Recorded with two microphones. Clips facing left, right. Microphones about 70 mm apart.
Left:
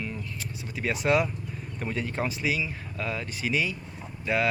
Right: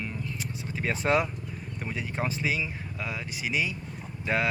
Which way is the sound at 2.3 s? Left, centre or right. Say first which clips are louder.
Left 1 dB; right.